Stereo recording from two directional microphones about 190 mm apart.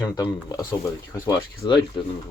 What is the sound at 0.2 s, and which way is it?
Speech, 20° left (ahead or behind).